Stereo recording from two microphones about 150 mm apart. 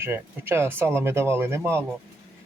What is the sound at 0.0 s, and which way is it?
Speech, 15° right (ahead or behind).